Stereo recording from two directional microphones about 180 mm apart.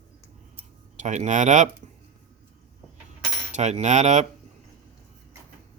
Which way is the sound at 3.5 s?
40° right (ahead or behind).